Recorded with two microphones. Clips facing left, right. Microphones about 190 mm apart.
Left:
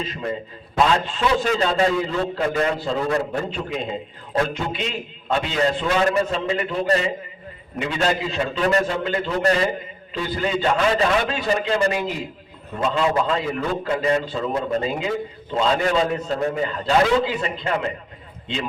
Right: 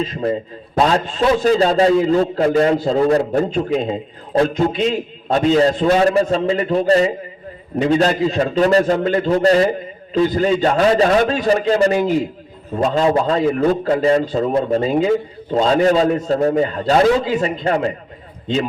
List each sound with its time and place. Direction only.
0.1 s a man's voice: 35° right (ahead or behind)